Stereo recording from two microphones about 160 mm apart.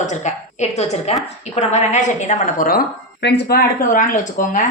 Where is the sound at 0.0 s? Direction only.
50° left (ahead or behind).